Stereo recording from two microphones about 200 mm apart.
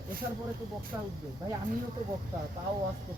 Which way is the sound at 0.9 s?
10° right (ahead or behind).